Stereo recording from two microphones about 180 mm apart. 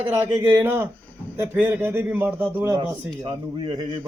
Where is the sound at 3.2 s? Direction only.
25° right (ahead or behind).